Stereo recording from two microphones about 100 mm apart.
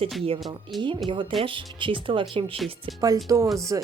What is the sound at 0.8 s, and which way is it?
Speech, 50° right (ahead or behind).